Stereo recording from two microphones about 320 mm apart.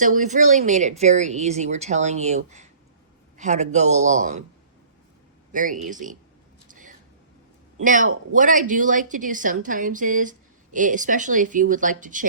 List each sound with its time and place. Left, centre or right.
0.0 s a woman's voice: right
5.5 s a woman's voice: right
6.7 s a sound: right
7.8 s a woman's voice: right